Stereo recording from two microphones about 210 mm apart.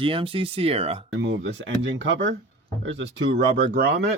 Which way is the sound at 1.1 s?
65° right (ahead or behind).